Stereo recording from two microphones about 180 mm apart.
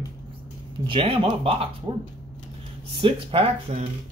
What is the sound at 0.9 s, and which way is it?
Speech, 30° right (ahead or behind).